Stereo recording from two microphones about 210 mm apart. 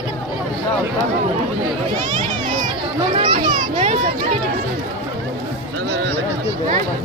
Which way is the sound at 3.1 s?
35° right (ahead or behind).